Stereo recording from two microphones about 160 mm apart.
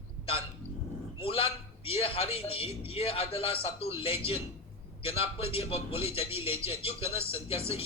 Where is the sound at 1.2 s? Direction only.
35° left (ahead or behind).